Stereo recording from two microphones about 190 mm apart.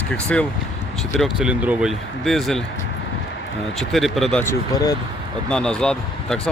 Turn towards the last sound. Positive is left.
turn(degrees=5)  # may be behind; listen again after turning